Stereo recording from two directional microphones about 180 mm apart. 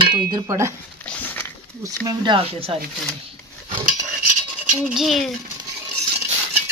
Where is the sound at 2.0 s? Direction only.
25° right (ahead or behind).